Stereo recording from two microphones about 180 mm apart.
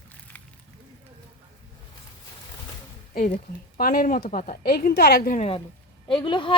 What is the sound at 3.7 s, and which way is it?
A woman's voice, 55° left (ahead or behind).